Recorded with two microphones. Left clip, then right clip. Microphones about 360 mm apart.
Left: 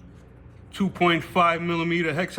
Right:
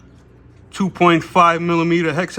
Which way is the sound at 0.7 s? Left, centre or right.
Centre.